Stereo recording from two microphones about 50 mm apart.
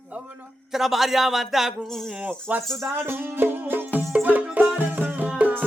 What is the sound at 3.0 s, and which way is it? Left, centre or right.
Music, right.